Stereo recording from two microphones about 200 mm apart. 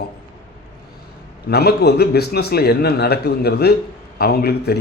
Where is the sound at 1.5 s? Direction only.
55° left (ahead or behind).